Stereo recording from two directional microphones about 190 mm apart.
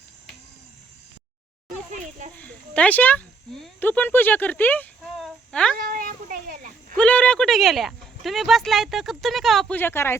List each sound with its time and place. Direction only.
2.0 s a child's voice: 40° right (ahead or behind)
2.4 s speech: 10° left (ahead or behind)
5.7 s speech: 50° right (ahead or behind)
6.9 s speech: 5° left (ahead or behind)